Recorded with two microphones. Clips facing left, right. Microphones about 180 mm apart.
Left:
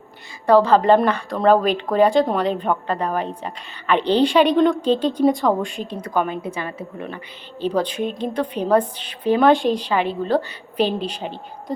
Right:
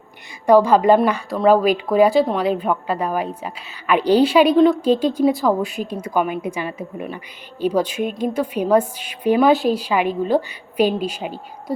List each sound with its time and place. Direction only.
0.4 s speech: 10° right (ahead or behind)